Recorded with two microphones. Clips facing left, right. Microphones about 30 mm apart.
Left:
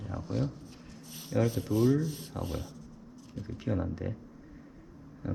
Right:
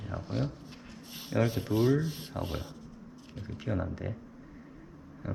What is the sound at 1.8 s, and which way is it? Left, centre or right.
Rub, right.